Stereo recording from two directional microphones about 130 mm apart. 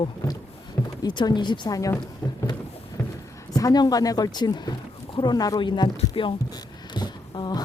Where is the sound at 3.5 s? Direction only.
30° left (ahead or behind).